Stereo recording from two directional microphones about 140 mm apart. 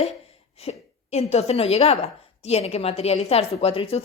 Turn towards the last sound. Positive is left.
turn(degrees=45)  # may be behind; listen again after turning